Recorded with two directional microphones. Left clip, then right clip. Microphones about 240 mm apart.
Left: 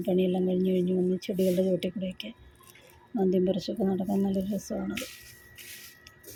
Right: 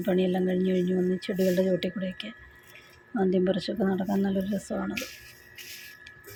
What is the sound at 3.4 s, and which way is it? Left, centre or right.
Speech, centre.